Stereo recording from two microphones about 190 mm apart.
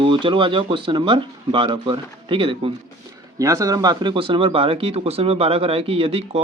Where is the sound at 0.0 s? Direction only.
25° right (ahead or behind).